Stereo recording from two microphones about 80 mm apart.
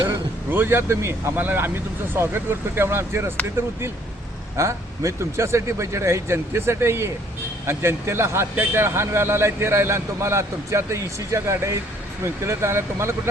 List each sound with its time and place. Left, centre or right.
0.5 s speech: right
4.5 s a man's voice: right